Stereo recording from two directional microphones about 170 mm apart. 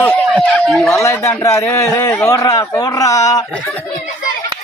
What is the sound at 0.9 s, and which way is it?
A child's voice, 15° left (ahead or behind).